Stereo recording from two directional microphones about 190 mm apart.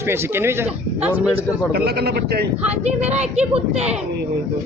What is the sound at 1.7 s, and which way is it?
Speech, 55° right (ahead or behind).